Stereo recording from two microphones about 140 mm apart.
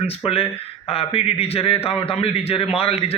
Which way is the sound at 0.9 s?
45° left (ahead or behind).